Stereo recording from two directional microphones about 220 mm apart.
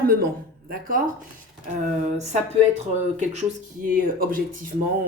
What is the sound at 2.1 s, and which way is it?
Speech, 30° right (ahead or behind).